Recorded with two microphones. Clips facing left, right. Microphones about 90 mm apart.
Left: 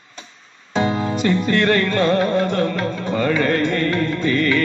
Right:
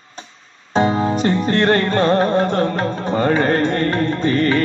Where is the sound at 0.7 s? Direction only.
35° right (ahead or behind).